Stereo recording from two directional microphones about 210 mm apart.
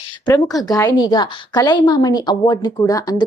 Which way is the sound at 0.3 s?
20° left (ahead or behind).